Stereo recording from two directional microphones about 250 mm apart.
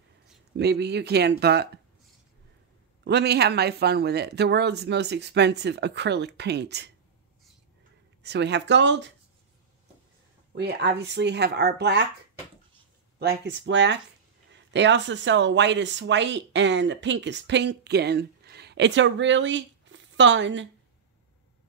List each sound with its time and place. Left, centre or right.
0.6 s speech: right
3.0 s speech: right
8.2 s speech: right
10.5 s speech: right
13.2 s speech: right